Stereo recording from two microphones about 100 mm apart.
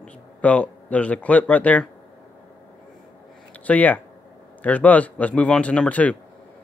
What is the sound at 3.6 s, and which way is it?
A man's voice, 15° left (ahead or behind).